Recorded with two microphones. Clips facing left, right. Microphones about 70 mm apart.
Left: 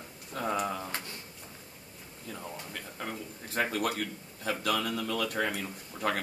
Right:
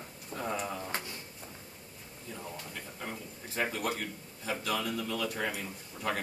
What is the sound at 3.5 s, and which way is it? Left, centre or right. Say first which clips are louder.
Speech: left 3 dB; left.